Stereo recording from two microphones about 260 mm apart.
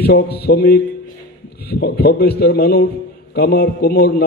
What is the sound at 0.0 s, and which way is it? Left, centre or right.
A man's voice, left.